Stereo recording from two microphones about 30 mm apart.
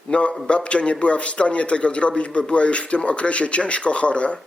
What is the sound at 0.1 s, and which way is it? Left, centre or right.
A man's voice, left.